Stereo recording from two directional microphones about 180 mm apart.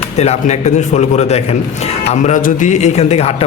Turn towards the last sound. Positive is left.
turn(degrees=35)  # may be behind; listen again after turning